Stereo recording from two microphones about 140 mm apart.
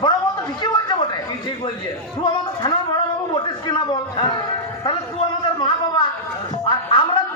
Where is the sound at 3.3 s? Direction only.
35° left (ahead or behind).